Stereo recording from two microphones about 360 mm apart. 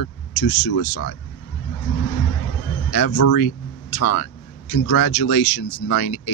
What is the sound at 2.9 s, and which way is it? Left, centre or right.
Speech, left.